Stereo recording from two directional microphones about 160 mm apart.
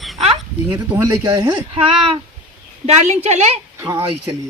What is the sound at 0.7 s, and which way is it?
Speech, 20° right (ahead or behind).